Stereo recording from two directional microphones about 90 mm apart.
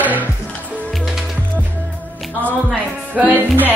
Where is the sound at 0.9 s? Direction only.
5° right (ahead or behind).